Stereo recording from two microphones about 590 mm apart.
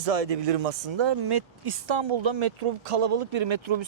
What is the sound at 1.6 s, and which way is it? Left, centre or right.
Speech, right.